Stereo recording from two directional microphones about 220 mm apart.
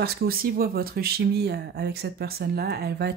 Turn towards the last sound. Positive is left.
turn(degrees=-45)  # may be behind; listen again after turning